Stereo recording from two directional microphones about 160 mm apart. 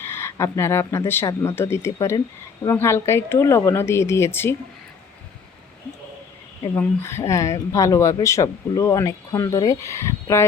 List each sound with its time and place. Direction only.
0.0 s speech: 15° left (ahead or behind)
6.7 s speech: 15° left (ahead or behind)